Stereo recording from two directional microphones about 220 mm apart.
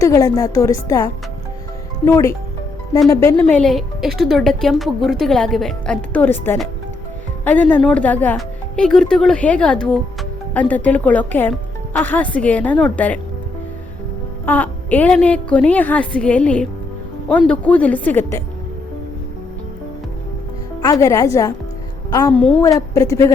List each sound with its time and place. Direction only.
0.0 s a woman's voice: 15° left (ahead or behind)
14.4 s a woman's voice: 5° left (ahead or behind)
20.8 s speech: 15° left (ahead or behind)
22.4 s a woman's voice: 5° left (ahead or behind)
23.0 s speech: 15° left (ahead or behind)